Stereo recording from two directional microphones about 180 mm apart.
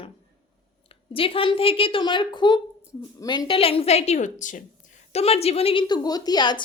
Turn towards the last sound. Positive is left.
turn(degrees=25)  # may be behind; listen again after turning